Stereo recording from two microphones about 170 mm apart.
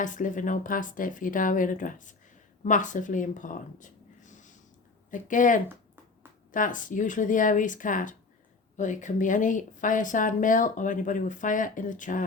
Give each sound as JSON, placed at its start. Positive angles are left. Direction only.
{"t": 0.0, "sound": "speech", "side_deg": 50}